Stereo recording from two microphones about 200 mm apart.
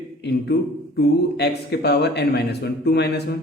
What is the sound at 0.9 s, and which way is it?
A man's voice, 55° left (ahead or behind).